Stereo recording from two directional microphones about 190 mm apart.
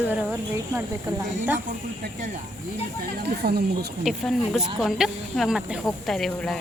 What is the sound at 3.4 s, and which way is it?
Speech, 55° right (ahead or behind).